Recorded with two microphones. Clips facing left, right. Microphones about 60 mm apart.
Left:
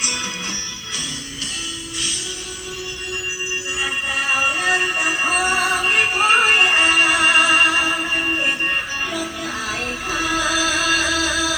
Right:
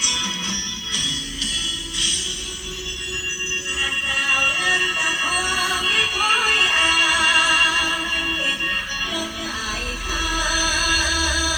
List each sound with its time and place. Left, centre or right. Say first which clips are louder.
0.0 s music: even; left
3.8 s synthetic singing: even; left